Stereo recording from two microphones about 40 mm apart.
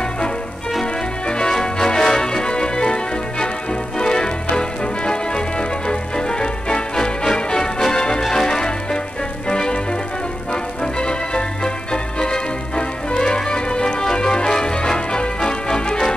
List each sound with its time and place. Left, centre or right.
1.2 s music: left